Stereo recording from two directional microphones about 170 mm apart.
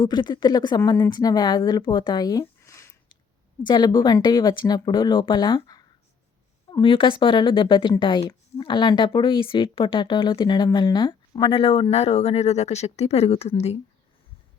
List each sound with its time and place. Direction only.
0.0 s speech: 25° left (ahead or behind)